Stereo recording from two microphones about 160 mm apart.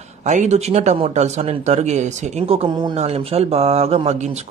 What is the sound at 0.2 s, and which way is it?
Speech, 50° right (ahead or behind).